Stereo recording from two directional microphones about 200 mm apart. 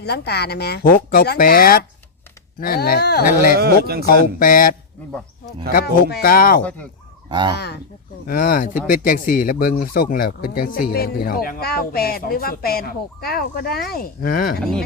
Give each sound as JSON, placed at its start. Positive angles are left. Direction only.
{"t": 0.0, "sound": "speech", "side_deg": 55}
{"t": 3.6, "sound": "speech", "side_deg": -50}
{"t": 4.4, "sound": "speech", "side_deg": 45}
{"t": 5.7, "sound": "speech", "side_deg": 55}
{"t": 6.6, "sound": "speech", "side_deg": 5}
{"t": 7.3, "sound": "speech", "side_deg": -25}
{"t": 7.5, "sound": "speech", "side_deg": 55}
{"t": 8.3, "sound": "speech", "side_deg": 45}